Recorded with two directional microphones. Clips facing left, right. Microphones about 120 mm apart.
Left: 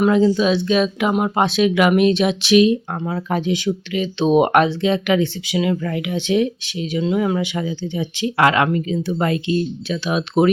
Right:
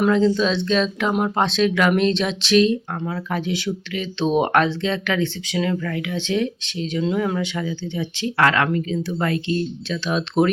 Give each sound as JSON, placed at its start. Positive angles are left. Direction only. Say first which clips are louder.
{"t": 0.0, "sound": "speech", "louder": "left 2 dB", "side_deg": 10}